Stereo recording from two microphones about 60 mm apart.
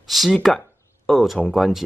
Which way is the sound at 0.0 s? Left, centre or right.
Centre.